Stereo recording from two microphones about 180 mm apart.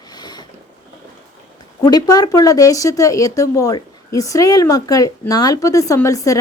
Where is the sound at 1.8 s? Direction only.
20° left (ahead or behind).